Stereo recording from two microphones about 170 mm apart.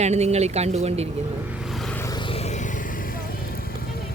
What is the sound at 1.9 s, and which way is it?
Vehicle, 20° left (ahead or behind).